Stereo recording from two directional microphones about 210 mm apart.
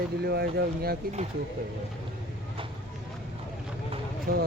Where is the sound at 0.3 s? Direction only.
50° right (ahead or behind).